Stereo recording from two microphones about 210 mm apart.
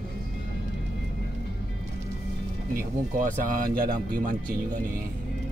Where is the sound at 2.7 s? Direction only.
45° right (ahead or behind).